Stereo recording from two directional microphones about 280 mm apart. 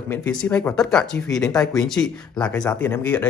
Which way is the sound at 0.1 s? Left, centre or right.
Centre.